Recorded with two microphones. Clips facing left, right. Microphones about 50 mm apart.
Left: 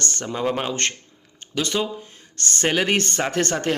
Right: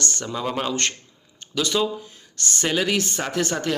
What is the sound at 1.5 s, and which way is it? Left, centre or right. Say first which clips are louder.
Speech: right 1 dB; left.